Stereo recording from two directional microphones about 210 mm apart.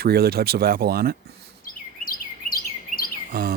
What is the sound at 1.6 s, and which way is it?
Chirp, 45° left (ahead or behind).